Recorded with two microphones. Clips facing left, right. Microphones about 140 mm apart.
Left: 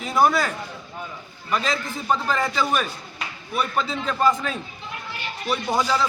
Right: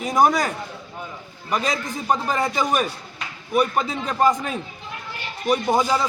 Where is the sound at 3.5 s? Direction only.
45° right (ahead or behind).